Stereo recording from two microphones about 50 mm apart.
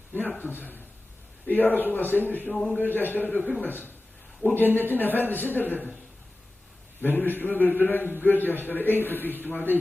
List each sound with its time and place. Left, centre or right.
0.1 s a man's voice: left
2.5 s a man's voice: centre
2.7 s a man's voice: left
7.0 s a man's voice: left